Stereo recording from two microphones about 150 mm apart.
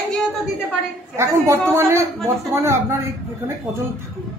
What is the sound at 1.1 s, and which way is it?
Speech, 20° right (ahead or behind).